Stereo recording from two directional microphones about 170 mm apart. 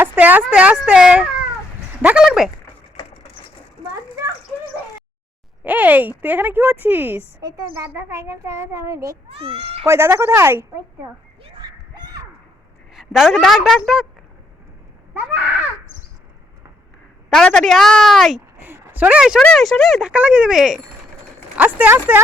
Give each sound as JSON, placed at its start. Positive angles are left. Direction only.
{"t": 0.0, "sound": "speech", "side_deg": -10}
{"t": 5.6, "sound": "speech", "side_deg": -10}
{"t": 7.4, "sound": "a woman's voice", "side_deg": -20}
{"t": 9.3, "sound": "speech", "side_deg": -35}
{"t": 9.8, "sound": "speech", "side_deg": -15}
{"t": 11.6, "sound": "a sound", "side_deg": -25}
{"t": 12.9, "sound": "speech", "side_deg": 0}
{"t": 15.1, "sound": "speech", "side_deg": -10}
{"t": 17.2, "sound": "speech", "side_deg": 5}
{"t": 18.5, "sound": "a sound", "side_deg": -10}
{"t": 19.4, "sound": "speech", "side_deg": 5}